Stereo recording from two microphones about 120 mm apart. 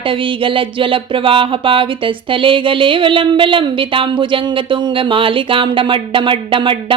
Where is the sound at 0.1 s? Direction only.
45° right (ahead or behind).